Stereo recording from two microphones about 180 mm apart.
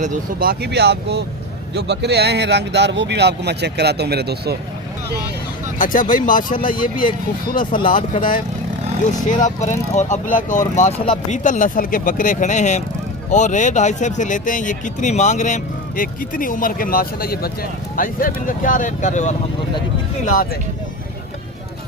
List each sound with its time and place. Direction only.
0.0 s speech: 50° right (ahead or behind)
5.8 s speech: 50° left (ahead or behind)